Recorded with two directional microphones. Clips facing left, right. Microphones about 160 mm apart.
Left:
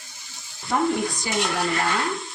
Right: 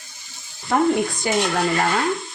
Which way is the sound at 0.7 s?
60° right (ahead or behind).